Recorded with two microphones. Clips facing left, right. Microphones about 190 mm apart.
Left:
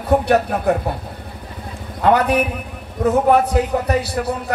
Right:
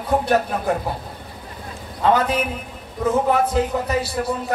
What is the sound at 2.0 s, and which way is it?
A man's voice, 65° left (ahead or behind).